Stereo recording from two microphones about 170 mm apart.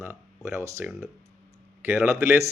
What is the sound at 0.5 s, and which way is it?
Speech, 15° right (ahead or behind).